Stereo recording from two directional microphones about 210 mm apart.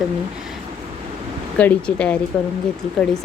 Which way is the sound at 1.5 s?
5° left (ahead or behind).